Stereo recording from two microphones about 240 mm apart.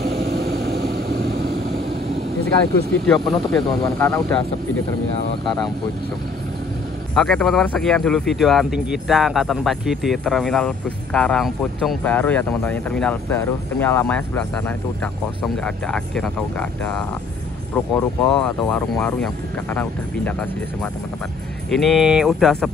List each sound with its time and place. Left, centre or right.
0.2 s vehicle: right
3.1 s speech: centre
7.2 s speech: centre
15.4 s speech: centre